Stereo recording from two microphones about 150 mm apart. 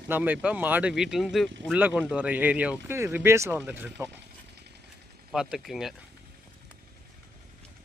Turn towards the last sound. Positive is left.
turn(degrees=0)  # may be behind; listen again after turning